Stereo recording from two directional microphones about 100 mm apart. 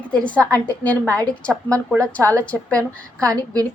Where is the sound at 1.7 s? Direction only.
30° right (ahead or behind).